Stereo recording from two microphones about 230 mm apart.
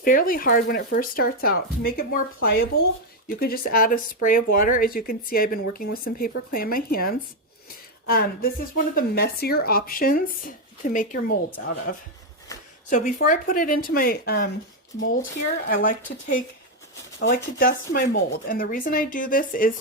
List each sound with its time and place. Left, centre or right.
0.0 s speech: left
12.9 s speech: left